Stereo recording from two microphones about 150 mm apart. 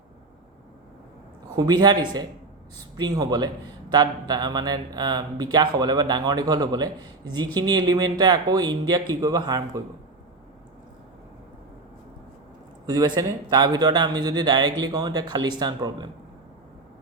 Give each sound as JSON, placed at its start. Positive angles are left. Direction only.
{"t": 1.5, "sound": "a man's voice", "side_deg": -25}
{"t": 12.8, "sound": "a man's voice", "side_deg": -25}